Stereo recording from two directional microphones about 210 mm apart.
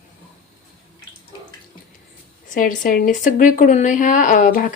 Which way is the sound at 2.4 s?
40° left (ahead or behind).